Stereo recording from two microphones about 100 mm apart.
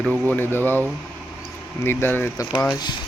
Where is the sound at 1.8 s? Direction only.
20° left (ahead or behind).